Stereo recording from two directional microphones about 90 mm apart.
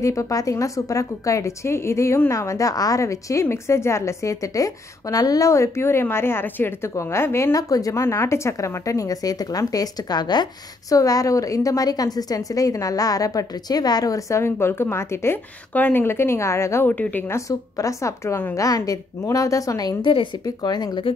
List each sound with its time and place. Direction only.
0.0 s a woman's voice: 40° left (ahead or behind); by 10.5 s 55° left (ahead or behind)
10.9 s a woman's voice: 40° left (ahead or behind)
16.9 s speech: 20° left (ahead or behind)
17.5 s a woman's voice: 40° left (ahead or behind)
18.7 s a woman's voice: 45° left (ahead or behind)